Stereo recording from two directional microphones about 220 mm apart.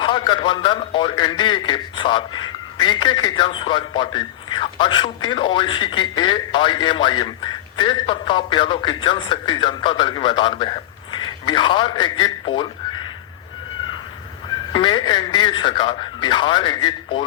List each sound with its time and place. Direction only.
0.0 s a man's voice: 20° left (ahead or behind)
14.7 s a man's voice: 20° left (ahead or behind)